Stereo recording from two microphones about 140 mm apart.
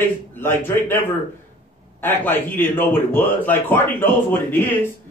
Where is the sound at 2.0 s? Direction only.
15° left (ahead or behind).